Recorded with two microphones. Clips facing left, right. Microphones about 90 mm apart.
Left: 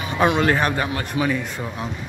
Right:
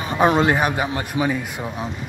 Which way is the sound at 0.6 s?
10° right (ahead or behind).